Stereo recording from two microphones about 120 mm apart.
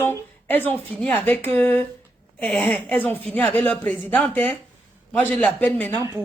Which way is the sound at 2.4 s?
10° left (ahead or behind).